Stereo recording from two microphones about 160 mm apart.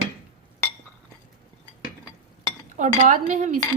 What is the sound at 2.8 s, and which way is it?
Speech, 50° right (ahead or behind).